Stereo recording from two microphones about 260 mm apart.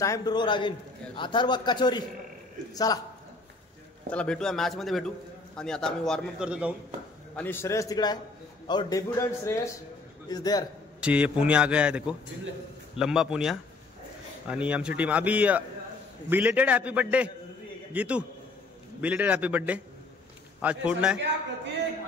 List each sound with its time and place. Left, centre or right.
0.0 s a man's voice: centre
4.1 s a man's voice: centre
7.3 s a man's voice: centre
11.0 s a man's voice: centre